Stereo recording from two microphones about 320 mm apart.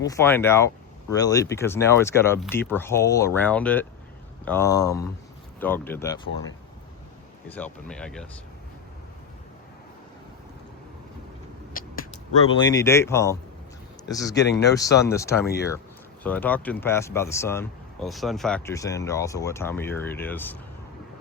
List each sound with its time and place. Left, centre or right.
0.1 s speech: centre
12.5 s speech: centre
15.4 s speech: left
16.2 s speech: centre